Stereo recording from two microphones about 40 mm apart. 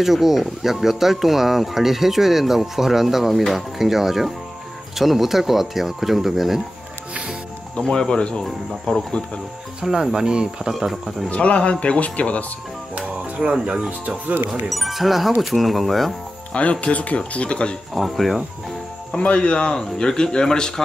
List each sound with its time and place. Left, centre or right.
0.0 s speech: centre
7.7 s a man's voice: left
9.8 s speech: centre
10.7 s speech: centre
11.2 s speech: left
12.9 s music: right
13.8 s speech: right
14.7 s speech: centre
16.8 s a man's voice: left
17.9 s speech: centre
19.1 s a man's voice: left